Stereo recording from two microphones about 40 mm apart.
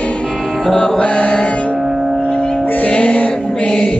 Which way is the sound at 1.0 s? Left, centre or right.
Left.